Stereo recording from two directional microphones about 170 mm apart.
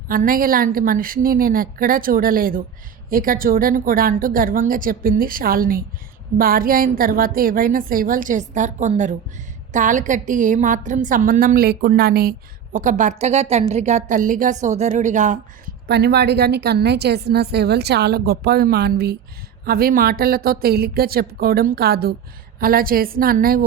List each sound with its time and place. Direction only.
0.1 s a woman's voice: 55° right (ahead or behind)
12.7 s a woman's voice: 50° right (ahead or behind)
15.9 s a woman's voice: 80° right; by 23.6 s 60° right (ahead or behind)